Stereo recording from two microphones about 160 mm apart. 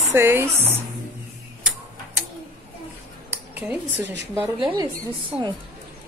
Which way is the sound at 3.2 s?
10° right (ahead or behind).